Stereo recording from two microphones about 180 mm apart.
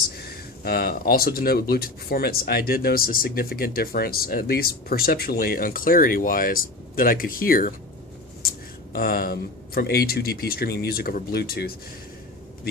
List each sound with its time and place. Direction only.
0.2 s speech: 60° left (ahead or behind)